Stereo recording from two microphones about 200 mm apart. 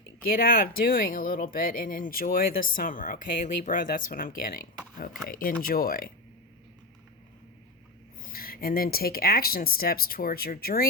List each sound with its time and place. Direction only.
0.2 s speech: 45° left (ahead or behind)
8.2 s speech: 45° left (ahead or behind)